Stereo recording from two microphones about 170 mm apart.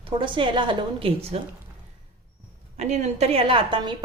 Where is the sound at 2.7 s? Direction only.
40° right (ahead or behind).